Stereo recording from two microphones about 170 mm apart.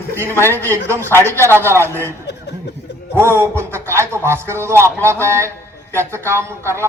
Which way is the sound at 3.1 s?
15° right (ahead or behind).